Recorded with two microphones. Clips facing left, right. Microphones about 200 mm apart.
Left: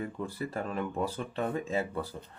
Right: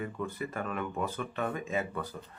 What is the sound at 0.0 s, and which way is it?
Speech, 30° left (ahead or behind).